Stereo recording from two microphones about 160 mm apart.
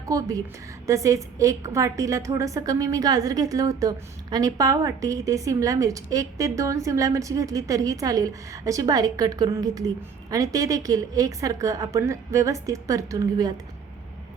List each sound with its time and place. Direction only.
0.1 s a woman's voice: 20° right (ahead or behind)